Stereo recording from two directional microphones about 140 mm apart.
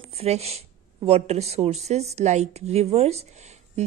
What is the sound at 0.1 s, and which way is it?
A woman's voice, 50° right (ahead or behind).